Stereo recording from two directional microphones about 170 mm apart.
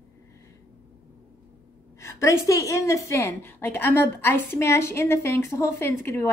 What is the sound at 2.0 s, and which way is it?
A woman's voice, 15° left (ahead or behind).